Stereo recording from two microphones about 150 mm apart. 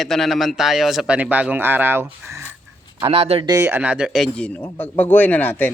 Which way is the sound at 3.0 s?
40° right (ahead or behind).